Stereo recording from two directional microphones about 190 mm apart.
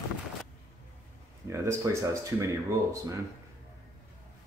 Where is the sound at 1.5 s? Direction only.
15° right (ahead or behind).